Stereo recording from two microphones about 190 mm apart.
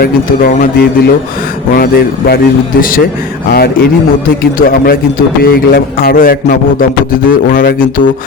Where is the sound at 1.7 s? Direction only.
50° left (ahead or behind).